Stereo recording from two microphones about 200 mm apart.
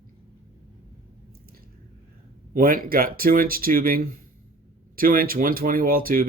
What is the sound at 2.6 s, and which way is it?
Speech, 45° right (ahead or behind).